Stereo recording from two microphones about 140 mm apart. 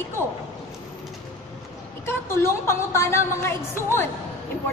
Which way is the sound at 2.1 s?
20° left (ahead or behind).